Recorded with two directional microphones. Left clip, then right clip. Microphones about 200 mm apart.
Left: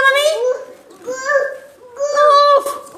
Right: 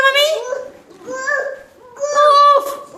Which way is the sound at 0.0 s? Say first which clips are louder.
Even; 10° right (ahead or behind).